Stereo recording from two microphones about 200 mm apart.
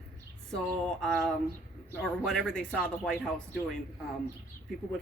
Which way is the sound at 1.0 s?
5° left (ahead or behind).